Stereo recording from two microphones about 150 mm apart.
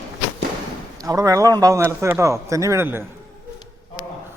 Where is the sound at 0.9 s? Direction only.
25° right (ahead or behind).